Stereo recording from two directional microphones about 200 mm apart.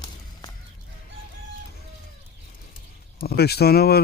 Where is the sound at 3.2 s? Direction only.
50° left (ahead or behind).